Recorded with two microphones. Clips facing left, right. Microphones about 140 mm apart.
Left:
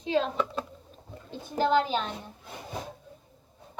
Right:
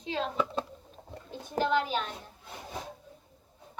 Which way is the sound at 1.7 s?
30° left (ahead or behind).